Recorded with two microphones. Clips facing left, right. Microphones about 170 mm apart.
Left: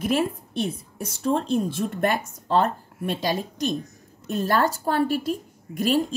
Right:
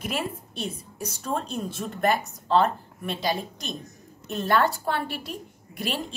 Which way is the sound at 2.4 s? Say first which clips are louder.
Even; 45° left (ahead or behind).